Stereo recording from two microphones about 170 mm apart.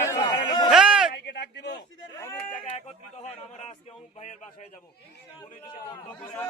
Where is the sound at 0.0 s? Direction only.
20° left (ahead or behind).